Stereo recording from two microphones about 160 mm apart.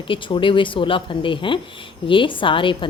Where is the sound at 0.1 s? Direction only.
30° left (ahead or behind).